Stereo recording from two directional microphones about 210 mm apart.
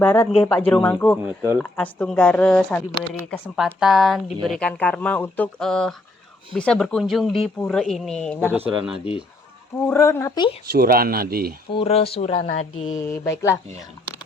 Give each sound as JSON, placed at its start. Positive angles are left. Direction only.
{"t": 0.0, "sound": "speech", "side_deg": 10}
{"t": 8.8, "sound": "speech", "side_deg": -5}
{"t": 9.7, "sound": "speech", "side_deg": 10}
{"t": 10.7, "sound": "speech", "side_deg": -45}
{"t": 11.7, "sound": "speech", "side_deg": 25}
{"t": 13.1, "sound": "speech", "side_deg": 15}